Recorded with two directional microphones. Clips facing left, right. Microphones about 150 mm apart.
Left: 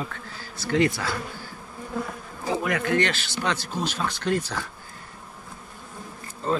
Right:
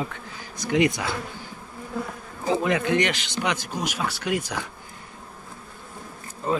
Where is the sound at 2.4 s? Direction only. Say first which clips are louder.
Right 3 dB; 20° right (ahead or behind).